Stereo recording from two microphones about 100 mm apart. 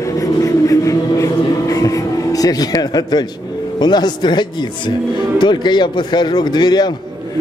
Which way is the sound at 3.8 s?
45° left (ahead or behind).